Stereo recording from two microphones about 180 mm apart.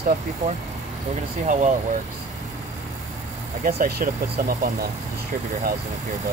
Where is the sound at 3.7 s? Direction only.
60° right (ahead or behind).